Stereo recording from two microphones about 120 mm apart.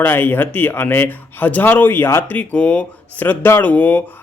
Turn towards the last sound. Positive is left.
turn(degrees=15)  # may be behind; listen again after turning